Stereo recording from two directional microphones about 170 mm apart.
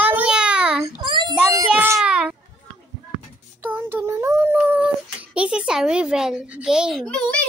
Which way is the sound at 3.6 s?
10° right (ahead or behind).